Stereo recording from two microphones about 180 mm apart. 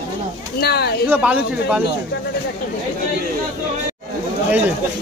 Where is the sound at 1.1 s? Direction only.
5° right (ahead or behind).